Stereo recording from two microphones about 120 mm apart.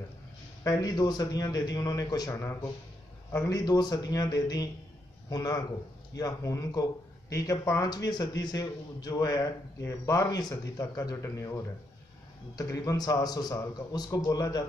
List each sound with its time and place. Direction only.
0.7 s a man's voice: 30° left (ahead or behind)